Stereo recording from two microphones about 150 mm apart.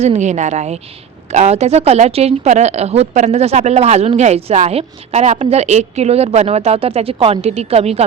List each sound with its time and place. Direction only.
0.0 s a woman's voice: 50° right (ahead or behind)